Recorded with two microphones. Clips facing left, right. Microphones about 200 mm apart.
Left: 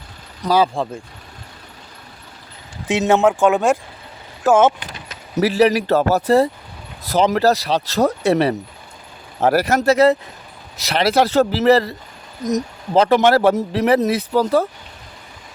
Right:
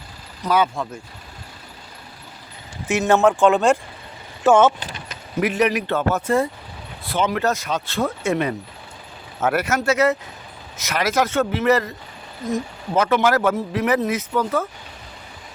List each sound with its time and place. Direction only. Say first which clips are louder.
0.4 s speech: left 3 dB; 30° left (ahead or behind)
2.8 s speech: left 1 dB; 15° left (ahead or behind)
5.4 s speech: left 5 dB; 35° left (ahead or behind)